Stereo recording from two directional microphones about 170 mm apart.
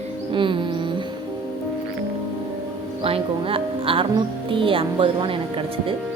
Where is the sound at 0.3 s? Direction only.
30° right (ahead or behind).